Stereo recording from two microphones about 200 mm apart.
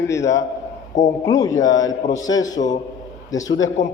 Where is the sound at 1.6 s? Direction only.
70° left (ahead or behind).